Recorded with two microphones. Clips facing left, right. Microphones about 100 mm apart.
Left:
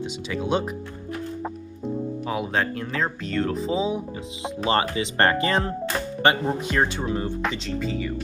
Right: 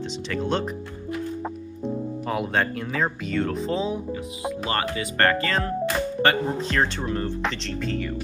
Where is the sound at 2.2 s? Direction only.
Centre (ahead or behind).